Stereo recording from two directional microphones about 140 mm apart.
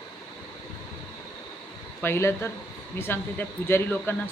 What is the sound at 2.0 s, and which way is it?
Speech, 20° left (ahead or behind).